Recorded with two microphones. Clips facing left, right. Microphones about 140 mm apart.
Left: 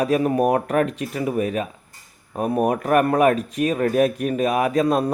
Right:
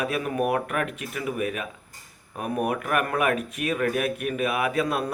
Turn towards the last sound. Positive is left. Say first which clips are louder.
# left 6 dB
turn(degrees=35)  # may be behind; listen again after turning